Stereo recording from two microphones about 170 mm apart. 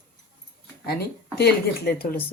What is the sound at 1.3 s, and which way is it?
Speech, 65° left (ahead or behind).